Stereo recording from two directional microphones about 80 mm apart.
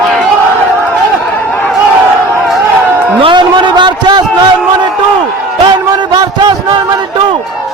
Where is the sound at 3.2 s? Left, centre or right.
Right.